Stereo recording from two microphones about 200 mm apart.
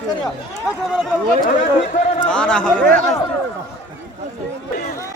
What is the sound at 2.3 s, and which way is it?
Speech, 5° left (ahead or behind).